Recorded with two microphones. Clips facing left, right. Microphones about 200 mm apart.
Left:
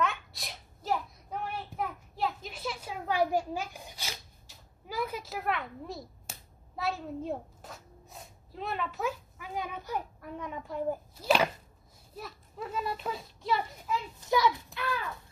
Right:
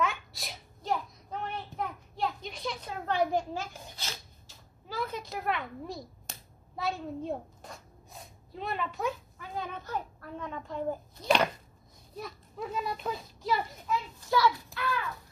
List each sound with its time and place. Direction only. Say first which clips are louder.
0.0 s a sound: even; centre (ahead or behind)
6.8 s a child's voice: even; centre (ahead or behind)
14.2 s a child's voice: even; 20° left (ahead or behind)